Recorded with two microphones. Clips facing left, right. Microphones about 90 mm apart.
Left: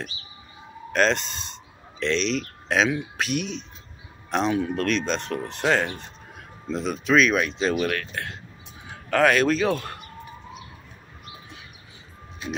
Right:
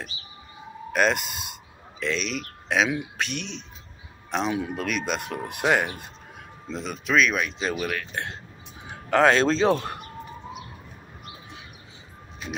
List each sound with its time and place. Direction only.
0.9 s speech: 10° right (ahead or behind)
3.2 s speech: 5° left (ahead or behind); by 6.0 s 15° right (ahead or behind)
6.7 s speech: centre (ahead or behind)
8.1 s a man's voice: 25° right (ahead or behind)